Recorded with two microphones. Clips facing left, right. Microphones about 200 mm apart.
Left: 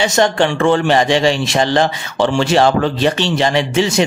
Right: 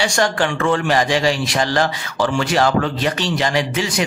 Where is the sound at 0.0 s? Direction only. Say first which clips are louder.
Left 4 dB; 20° left (ahead or behind).